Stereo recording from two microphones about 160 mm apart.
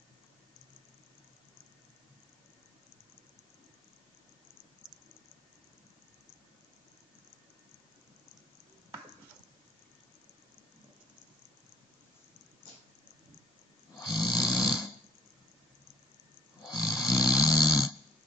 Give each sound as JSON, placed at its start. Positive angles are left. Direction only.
{"t": 14.1, "sound": "snoring", "side_deg": 25}
{"t": 16.7, "sound": "snoring", "side_deg": 25}